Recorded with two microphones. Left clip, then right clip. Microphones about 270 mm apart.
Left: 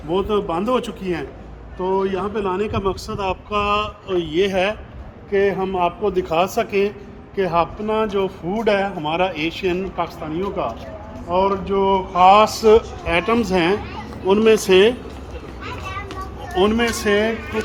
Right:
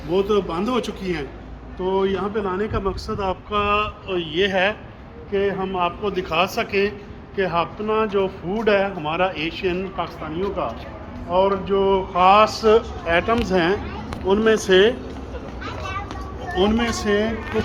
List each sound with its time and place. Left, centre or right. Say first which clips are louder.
0.1 s a man's voice: even; centre; by 14.9 s left
16.6 s a man's voice: left 3 dB; centre